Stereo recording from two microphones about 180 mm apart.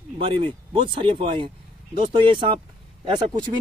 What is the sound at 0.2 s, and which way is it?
Speech, 30° right (ahead or behind).